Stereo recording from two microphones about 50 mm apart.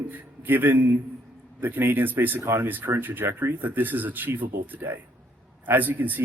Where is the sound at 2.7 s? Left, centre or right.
Right.